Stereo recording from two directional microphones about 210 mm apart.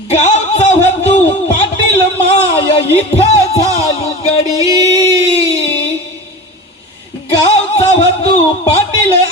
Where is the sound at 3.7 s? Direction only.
30° left (ahead or behind).